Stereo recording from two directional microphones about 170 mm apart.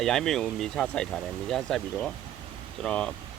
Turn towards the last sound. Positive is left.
turn(degrees=5)  # may be behind; listen again after turning